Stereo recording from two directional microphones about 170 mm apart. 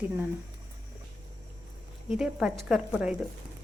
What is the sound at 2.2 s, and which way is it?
Speech, 5° right (ahead or behind).